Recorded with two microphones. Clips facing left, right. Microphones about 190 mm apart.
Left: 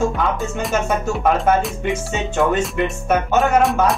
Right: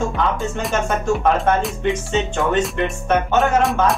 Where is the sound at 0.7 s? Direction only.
5° left (ahead or behind).